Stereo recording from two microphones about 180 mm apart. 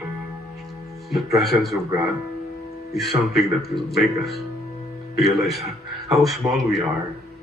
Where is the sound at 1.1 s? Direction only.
Centre (ahead or behind).